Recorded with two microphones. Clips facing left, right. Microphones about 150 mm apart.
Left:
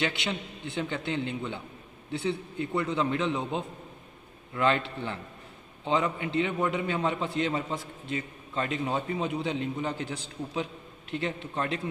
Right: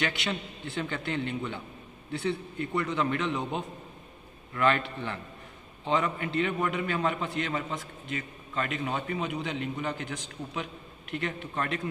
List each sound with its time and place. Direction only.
0.0 s a man's voice: 25° left (ahead or behind)